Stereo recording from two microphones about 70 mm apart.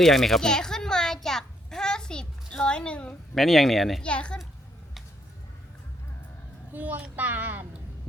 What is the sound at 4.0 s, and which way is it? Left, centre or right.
Speech, centre.